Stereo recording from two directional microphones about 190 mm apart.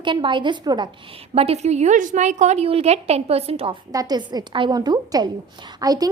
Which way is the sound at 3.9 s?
20° right (ahead or behind).